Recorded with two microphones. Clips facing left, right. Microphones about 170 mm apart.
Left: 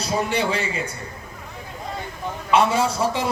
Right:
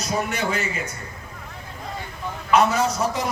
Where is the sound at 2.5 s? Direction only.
30° left (ahead or behind).